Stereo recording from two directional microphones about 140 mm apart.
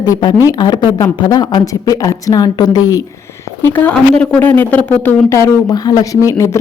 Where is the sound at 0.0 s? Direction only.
30° left (ahead or behind).